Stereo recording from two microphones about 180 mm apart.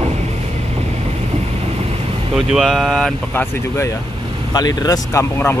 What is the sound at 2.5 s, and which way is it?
Speech, centre (ahead or behind).